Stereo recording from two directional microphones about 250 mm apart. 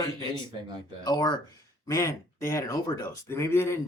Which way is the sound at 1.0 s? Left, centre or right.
Centre.